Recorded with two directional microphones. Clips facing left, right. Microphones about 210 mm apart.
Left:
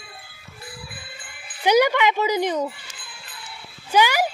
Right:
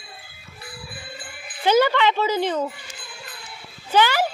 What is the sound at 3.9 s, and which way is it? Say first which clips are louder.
Speech: even; 10° left (ahead or behind).